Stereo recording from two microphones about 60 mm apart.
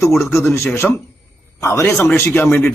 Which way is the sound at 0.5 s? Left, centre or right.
Left.